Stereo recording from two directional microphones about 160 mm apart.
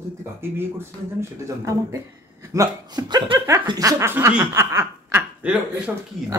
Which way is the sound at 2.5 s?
20° right (ahead or behind).